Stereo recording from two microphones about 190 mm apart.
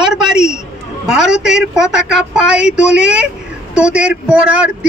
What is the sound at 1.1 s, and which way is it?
Speech, 5° right (ahead or behind).